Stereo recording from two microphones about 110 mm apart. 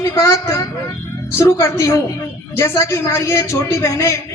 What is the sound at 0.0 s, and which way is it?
A woman's voice, 30° left (ahead or behind).